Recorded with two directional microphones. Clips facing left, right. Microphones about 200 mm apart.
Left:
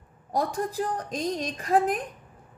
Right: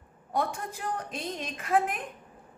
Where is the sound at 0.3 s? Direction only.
35° left (ahead or behind).